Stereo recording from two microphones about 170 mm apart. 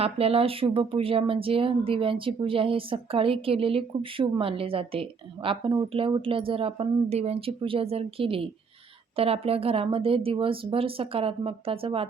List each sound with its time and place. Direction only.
0.0 s a woman's voice: 35° right (ahead or behind)